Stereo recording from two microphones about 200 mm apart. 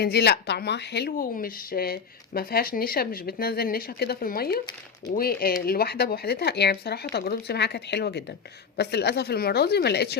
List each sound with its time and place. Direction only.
0.0 s speech: 55° left (ahead or behind)